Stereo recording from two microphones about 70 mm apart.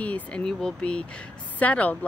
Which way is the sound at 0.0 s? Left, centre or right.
Centre.